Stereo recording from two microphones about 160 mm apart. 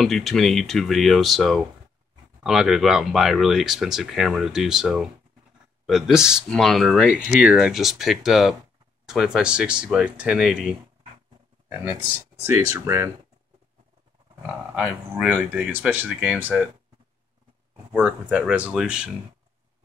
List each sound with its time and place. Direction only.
0.0 s speech: centre (ahead or behind); by 13.1 s 20° right (ahead or behind)
14.4 s speech: 5° right (ahead or behind)
17.9 s speech: 5° right (ahead or behind)